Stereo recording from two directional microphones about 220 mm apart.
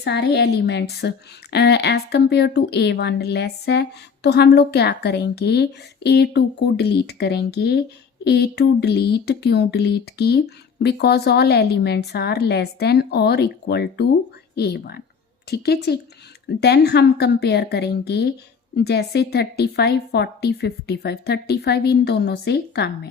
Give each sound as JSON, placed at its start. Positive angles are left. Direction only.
{"t": 0.0, "sound": "a woman's voice", "side_deg": 50}